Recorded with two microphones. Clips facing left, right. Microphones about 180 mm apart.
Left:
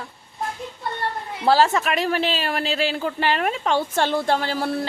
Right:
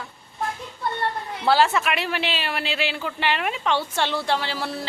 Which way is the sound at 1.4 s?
40° left (ahead or behind).